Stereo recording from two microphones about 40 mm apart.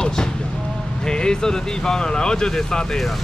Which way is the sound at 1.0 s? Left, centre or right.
Centre.